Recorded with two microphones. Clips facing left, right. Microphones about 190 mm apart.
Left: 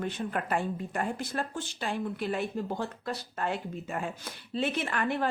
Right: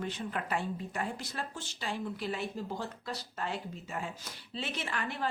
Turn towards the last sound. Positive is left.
turn(degrees=55)  # may be behind; listen again after turning